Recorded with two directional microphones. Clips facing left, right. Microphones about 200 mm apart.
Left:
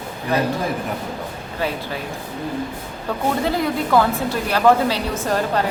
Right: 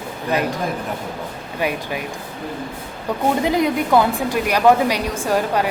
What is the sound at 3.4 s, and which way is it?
A woman's voice, 15° right (ahead or behind).